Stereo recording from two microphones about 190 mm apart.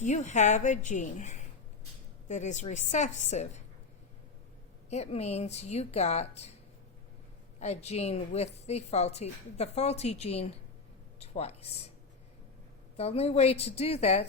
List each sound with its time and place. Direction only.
0.0 s a woman's voice: 40° left (ahead or behind)
4.9 s a woman's voice: 35° left (ahead or behind)
7.6 s a woman's voice: 35° left (ahead or behind)
13.0 s a woman's voice: 30° left (ahead or behind)